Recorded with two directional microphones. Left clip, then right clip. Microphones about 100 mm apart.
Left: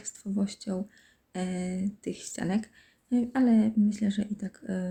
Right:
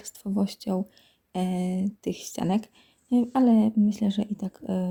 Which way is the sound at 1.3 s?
60° right (ahead or behind).